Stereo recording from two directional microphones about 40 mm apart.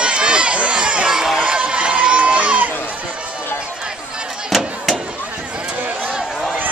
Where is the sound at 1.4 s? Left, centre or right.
Right.